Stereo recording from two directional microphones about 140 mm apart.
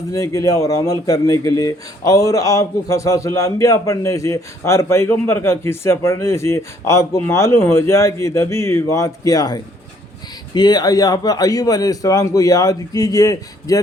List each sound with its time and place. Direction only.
0.1 s speech: 25° left (ahead or behind)